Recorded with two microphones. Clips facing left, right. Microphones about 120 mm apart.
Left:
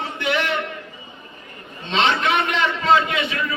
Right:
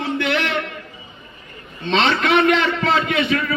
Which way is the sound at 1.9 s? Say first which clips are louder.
Right 2 dB; 55° right (ahead or behind).